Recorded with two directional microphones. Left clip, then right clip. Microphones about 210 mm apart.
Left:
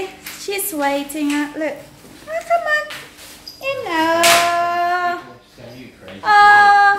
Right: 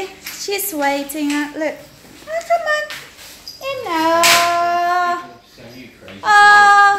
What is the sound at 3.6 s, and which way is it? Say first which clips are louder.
Child singing: even; 25° right (ahead or behind).